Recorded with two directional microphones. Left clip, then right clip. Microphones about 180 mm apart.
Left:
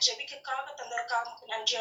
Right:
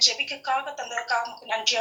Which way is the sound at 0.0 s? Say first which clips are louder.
Right 7 dB; 35° right (ahead or behind).